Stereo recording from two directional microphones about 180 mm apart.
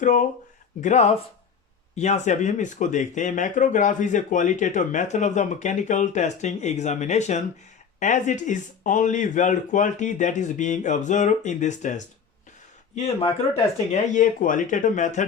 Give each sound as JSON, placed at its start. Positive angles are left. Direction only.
{"t": 0.0, "sound": "speech", "side_deg": 45}
{"t": 13.9, "sound": "speech", "side_deg": 45}